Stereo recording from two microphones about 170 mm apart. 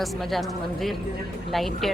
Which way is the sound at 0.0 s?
Centre (ahead or behind).